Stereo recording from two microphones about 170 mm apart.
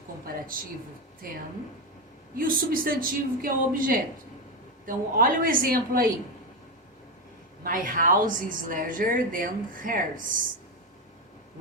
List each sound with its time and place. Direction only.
0.3 s speech: 55° right (ahead or behind)
2.3 s a man's voice: 55° right (ahead or behind)
7.6 s a woman's voice: 55° right (ahead or behind)